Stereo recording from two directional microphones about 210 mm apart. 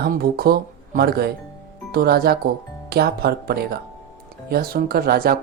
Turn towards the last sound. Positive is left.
turn(degrees=-45)  # may be behind; listen again after turning